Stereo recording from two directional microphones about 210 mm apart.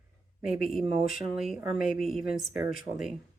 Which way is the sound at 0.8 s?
30° right (ahead or behind).